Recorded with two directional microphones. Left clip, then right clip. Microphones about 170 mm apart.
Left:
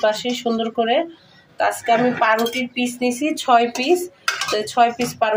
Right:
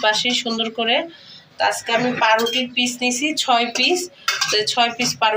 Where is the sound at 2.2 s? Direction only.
50° left (ahead or behind).